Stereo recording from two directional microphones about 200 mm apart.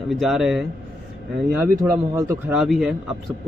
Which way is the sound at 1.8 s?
15° right (ahead or behind).